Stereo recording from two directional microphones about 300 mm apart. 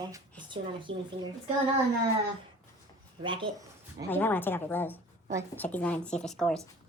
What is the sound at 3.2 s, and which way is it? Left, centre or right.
Speech, centre.